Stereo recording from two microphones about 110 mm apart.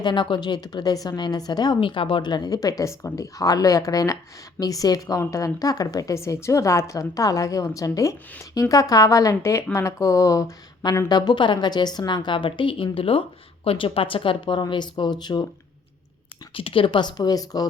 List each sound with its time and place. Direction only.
0.0 s a woman's voice: 45° left (ahead or behind)
16.6 s a woman's voice: 55° left (ahead or behind); by 17.7 s 35° left (ahead or behind)